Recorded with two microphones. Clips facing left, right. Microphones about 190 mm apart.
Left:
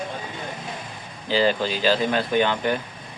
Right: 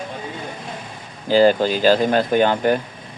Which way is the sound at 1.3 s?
45° right (ahead or behind).